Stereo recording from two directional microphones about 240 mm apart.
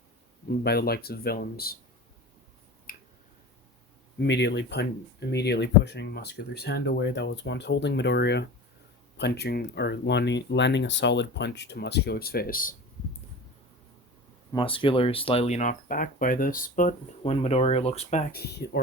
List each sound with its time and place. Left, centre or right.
0.4 s speech: left
2.9 s finger snapping: left
4.2 s speech: left
14.5 s speech: left